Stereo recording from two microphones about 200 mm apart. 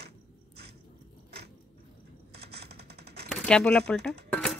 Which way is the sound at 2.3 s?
55° right (ahead or behind).